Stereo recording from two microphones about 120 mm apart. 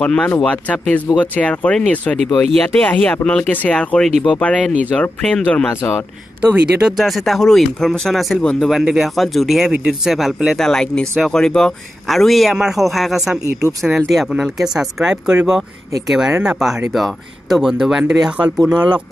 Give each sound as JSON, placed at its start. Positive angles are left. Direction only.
{"t": 0.0, "sound": "speech", "side_deg": 10}
{"t": 6.4, "sound": "speech", "side_deg": -10}